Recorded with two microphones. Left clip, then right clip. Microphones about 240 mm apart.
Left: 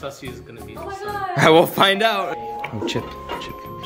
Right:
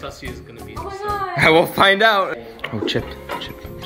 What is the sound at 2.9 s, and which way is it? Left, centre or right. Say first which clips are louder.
Music: right 3 dB; centre.